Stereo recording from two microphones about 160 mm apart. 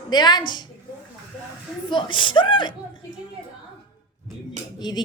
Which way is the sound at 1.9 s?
30° left (ahead or behind).